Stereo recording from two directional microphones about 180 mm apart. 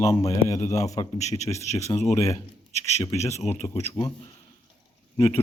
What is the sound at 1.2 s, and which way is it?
Speech, 40° left (ahead or behind).